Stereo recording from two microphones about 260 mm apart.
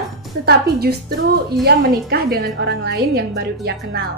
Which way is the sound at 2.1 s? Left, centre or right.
Right.